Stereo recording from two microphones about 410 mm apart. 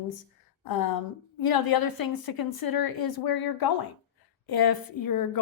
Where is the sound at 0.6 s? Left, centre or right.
Left.